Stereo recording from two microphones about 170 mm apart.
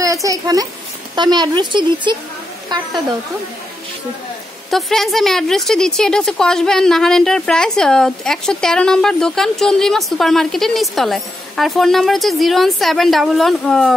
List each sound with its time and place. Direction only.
0.0 s a sound: 20° right (ahead or behind)
1.1 s speech: 25° right (ahead or behind)
4.6 s a woman's voice: centre (ahead or behind)